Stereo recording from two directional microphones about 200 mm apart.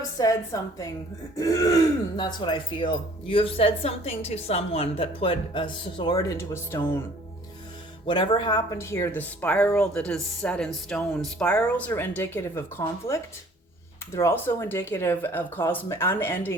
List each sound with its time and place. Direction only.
0.2 s speech: 15° left (ahead or behind)
8.0 s speech: 25° left (ahead or behind)